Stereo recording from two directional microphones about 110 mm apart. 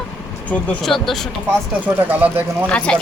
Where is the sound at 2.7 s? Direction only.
10° left (ahead or behind).